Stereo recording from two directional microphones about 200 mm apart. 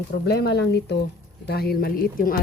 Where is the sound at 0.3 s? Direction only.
55° left (ahead or behind).